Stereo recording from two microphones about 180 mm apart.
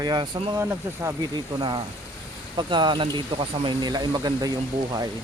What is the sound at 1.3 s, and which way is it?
Speech, 25° right (ahead or behind).